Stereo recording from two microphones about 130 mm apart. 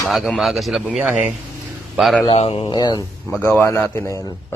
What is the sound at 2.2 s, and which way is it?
Speech, 50° left (ahead or behind).